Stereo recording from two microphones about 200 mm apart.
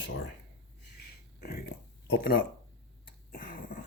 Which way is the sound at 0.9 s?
50° left (ahead or behind).